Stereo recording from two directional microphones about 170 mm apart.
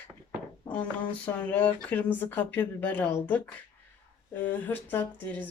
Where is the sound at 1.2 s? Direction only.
10° left (ahead or behind).